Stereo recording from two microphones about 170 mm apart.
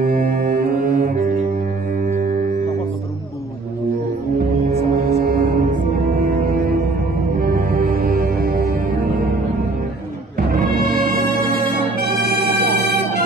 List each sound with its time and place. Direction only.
0.0 s music: 60° right (ahead or behind)
4.7 s music: 60° right (ahead or behind)
10.5 s music: 60° right (ahead or behind)